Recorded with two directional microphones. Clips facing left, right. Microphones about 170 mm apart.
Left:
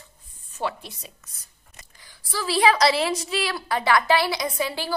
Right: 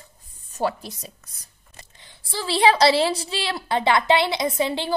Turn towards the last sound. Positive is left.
turn(degrees=-20)  # may be behind; listen again after turning